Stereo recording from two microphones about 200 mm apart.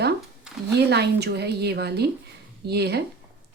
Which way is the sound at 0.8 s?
55° right (ahead or behind).